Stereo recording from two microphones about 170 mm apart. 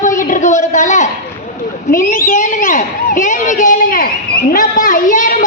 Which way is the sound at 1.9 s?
55° left (ahead or behind).